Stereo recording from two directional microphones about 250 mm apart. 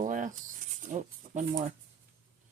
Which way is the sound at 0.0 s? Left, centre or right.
Right.